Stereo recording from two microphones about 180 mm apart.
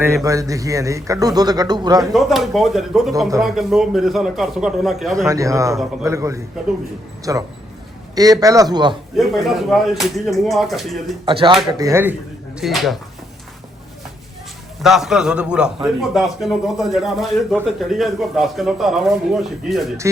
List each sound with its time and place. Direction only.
0.0 s speech: 20° right (ahead or behind)
2.1 s a man's voice: centre (ahead or behind)
5.1 s a man's voice: 15° right (ahead or behind)
9.1 s a man's voice: centre (ahead or behind)
11.3 s speech: 30° right (ahead or behind)
12.5 s a man's voice: centre (ahead or behind)
14.8 s a man's voice: centre (ahead or behind)